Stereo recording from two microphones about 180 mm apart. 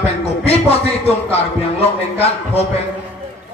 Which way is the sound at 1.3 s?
35° left (ahead or behind).